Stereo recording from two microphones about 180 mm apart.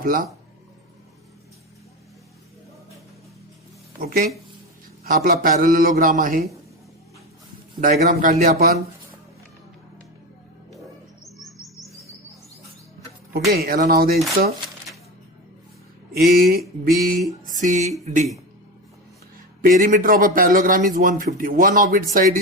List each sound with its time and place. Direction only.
0.0 s speech: 50° right (ahead or behind)
4.0 s speech: 50° right (ahead or behind)
7.8 s speech: 50° right (ahead or behind)
13.5 s speech: 55° right (ahead or behind)
16.1 s speech: 55° right (ahead or behind)
19.6 s speech: 45° right (ahead or behind)